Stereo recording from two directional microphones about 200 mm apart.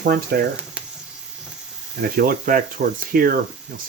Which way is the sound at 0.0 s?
50° right (ahead or behind).